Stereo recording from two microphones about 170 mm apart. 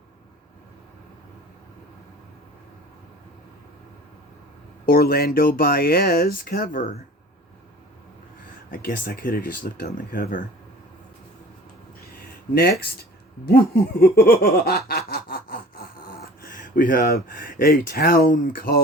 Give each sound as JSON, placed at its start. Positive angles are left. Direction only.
{"t": 4.9, "sound": "speech", "side_deg": 65}
{"t": 8.7, "sound": "speech", "side_deg": 65}
{"t": 11.9, "sound": "a sound", "side_deg": 60}
{"t": 12.8, "sound": "speech", "side_deg": 65}